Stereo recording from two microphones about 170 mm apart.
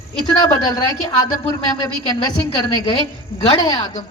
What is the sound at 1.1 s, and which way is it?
Speech, 20° left (ahead or behind).